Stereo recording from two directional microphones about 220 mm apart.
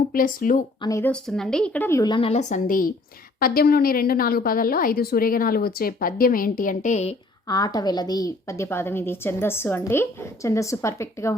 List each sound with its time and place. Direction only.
0.1 s a woman's voice: 40° left (ahead or behind)
0.8 s a woman's voice: 15° left (ahead or behind); by 7.2 s 30° left (ahead or behind)
7.4 s a woman's voice: 15° left (ahead or behind)